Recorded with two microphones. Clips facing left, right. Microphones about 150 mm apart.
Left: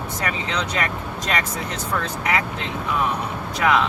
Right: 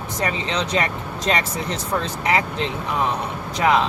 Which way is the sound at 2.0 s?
30° right (ahead or behind).